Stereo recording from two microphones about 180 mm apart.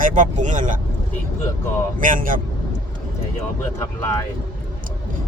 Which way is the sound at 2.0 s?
50° right (ahead or behind).